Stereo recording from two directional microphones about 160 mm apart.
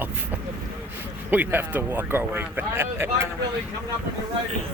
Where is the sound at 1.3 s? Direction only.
10° right (ahead or behind).